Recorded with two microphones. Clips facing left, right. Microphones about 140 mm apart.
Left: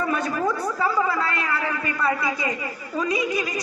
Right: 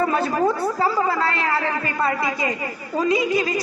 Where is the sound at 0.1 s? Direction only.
30° right (ahead or behind).